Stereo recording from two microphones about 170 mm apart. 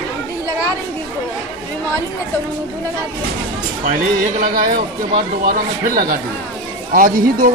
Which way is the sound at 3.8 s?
50° right (ahead or behind).